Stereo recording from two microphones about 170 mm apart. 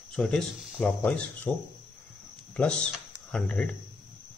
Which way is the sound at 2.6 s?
5° left (ahead or behind).